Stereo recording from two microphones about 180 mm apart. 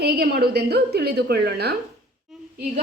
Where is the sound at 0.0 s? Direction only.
60° right (ahead or behind).